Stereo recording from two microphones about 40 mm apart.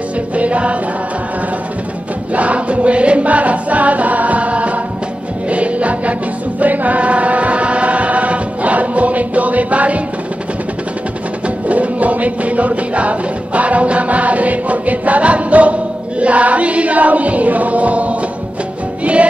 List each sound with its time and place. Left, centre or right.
0.4 s music: right
2.3 s music: right
6.6 s chant: right
11.4 s music: right